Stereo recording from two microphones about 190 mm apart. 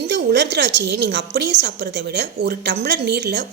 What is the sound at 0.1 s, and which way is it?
A woman's voice, 60° right (ahead or behind).